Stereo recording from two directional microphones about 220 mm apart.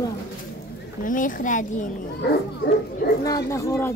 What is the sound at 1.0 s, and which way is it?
Speech, 35° left (ahead or behind).